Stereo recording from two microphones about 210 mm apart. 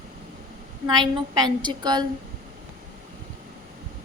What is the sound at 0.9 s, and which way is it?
A woman's voice, 20° right (ahead or behind).